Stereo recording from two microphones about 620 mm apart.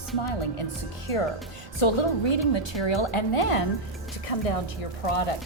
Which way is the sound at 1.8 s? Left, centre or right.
Left.